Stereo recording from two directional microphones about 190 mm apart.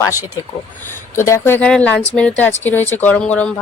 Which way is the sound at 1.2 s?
10° left (ahead or behind).